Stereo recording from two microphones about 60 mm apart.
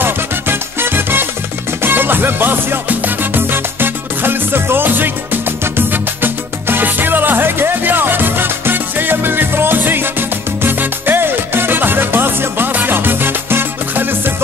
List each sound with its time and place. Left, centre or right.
0.0 s music: right